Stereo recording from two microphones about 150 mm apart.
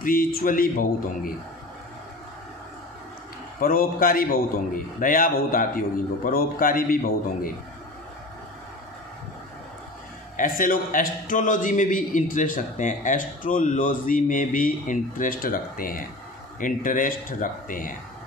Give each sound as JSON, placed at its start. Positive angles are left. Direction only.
{"t": 0.0, "sound": "a man's voice", "side_deg": 75}
{"t": 3.6, "sound": "a man's voice", "side_deg": 75}
{"t": 10.3, "sound": "a man's voice", "side_deg": 65}